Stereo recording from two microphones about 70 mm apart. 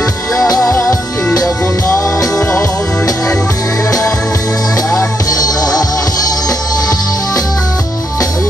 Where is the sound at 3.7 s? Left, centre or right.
Left.